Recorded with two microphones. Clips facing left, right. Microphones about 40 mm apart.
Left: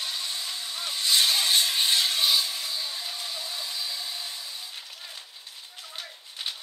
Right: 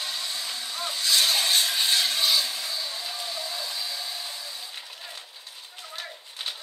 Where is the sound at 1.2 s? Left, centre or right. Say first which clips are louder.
Even; right.